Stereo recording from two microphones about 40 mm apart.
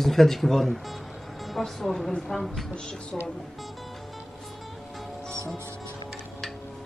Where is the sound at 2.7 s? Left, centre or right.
Centre.